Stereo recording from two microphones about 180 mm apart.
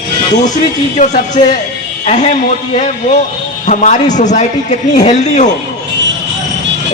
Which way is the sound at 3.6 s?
40° left (ahead or behind).